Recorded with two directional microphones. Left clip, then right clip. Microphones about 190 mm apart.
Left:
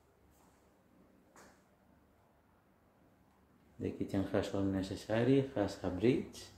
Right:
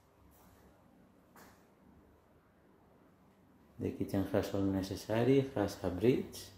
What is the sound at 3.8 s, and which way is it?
Speech, 10° right (ahead or behind).